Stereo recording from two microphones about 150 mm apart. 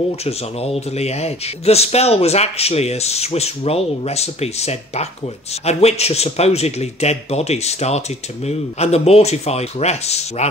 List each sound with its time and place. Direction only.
0.2 s speech: 40° left (ahead or behind)